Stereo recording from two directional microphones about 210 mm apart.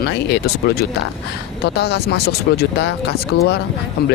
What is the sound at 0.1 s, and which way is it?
Speech, 50° left (ahead or behind).